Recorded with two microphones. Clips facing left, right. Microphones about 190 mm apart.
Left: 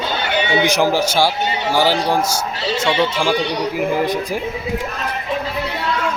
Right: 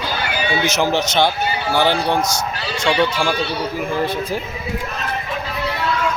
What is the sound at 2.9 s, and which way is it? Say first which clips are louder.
Speech: right 1 dB; 20° left (ahead or behind).